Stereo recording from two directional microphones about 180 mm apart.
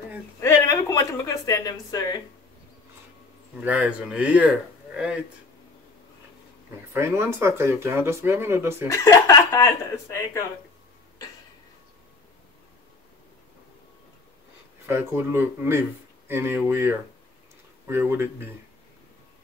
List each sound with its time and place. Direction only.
0.4 s a sound: 15° left (ahead or behind)
3.6 s speech: 10° right (ahead or behind)
6.9 s speech: 15° right (ahead or behind)
8.8 s speech: 15° left (ahead or behind)
14.9 s speech: 15° right (ahead or behind)